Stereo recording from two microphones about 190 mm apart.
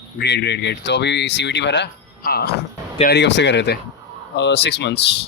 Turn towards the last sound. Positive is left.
turn(degrees=65)  # may be behind; listen again after turning